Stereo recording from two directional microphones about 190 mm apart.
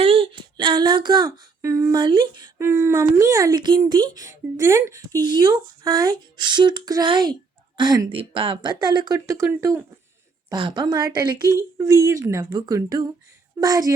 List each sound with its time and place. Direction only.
0.0 s female singing: 30° right (ahead or behind)